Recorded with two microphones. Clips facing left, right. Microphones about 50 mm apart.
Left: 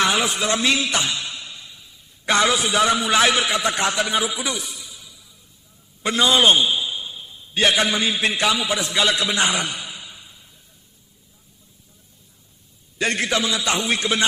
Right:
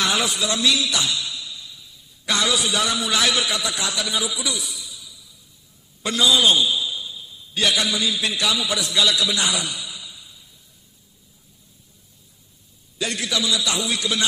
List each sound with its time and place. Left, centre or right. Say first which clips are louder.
0.0 s a sound: left 2 dB; left
0.3 s a man's voice: left 1 dB; left
13.0 s a man's voice: left 4 dB; left